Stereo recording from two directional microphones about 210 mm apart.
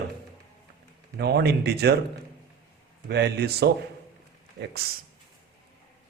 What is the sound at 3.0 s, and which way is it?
Speech, 50° right (ahead or behind).